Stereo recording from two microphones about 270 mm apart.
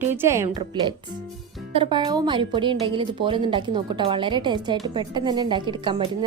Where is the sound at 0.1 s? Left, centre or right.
Centre.